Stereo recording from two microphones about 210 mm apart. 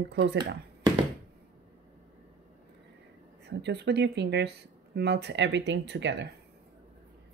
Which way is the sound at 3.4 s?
55° right (ahead or behind).